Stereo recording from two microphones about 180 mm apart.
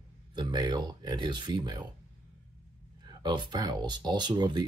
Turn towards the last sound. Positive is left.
turn(degrees=-25)  # may be behind; listen again after turning